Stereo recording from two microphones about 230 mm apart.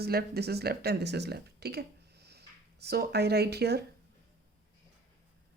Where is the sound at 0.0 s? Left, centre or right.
Right.